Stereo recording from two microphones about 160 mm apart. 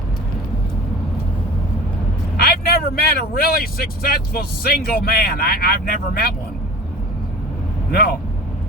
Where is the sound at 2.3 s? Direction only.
75° left (ahead or behind).